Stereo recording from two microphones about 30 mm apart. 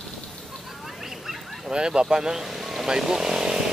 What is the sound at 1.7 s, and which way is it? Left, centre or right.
Speech, right.